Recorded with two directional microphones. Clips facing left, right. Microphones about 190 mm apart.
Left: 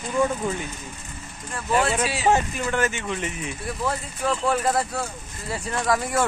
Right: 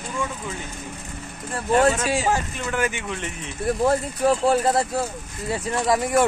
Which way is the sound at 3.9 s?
35° right (ahead or behind).